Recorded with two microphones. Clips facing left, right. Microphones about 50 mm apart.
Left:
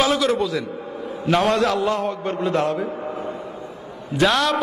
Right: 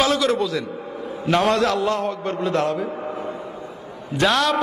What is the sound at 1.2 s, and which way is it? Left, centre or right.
A man's voice, centre.